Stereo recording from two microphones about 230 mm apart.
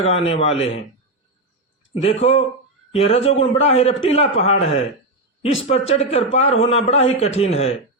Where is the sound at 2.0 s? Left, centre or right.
Left.